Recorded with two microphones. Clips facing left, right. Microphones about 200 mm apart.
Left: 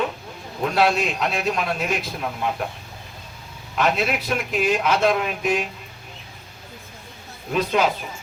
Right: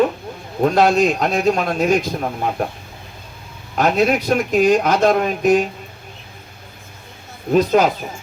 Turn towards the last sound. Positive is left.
turn(degrees=-40)  # may be behind; listen again after turning